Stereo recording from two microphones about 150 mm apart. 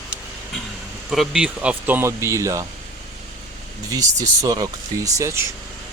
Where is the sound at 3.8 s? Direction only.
25° right (ahead or behind).